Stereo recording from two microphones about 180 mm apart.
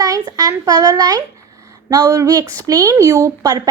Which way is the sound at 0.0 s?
20° right (ahead or behind).